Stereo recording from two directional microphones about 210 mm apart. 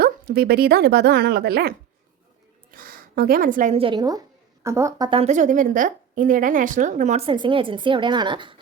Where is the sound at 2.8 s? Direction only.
45° right (ahead or behind); by 8.5 s 20° right (ahead or behind).